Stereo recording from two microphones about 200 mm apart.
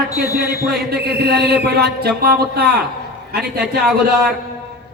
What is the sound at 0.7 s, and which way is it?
Speech, 55° right (ahead or behind).